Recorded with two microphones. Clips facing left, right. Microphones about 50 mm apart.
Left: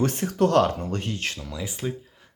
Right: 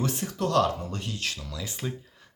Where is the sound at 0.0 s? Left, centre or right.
Left.